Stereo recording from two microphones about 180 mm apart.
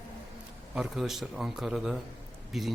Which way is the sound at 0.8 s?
Centre (ahead or behind).